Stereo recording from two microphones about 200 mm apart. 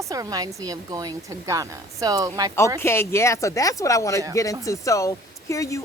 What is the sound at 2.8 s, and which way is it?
Speech, 10° left (ahead or behind).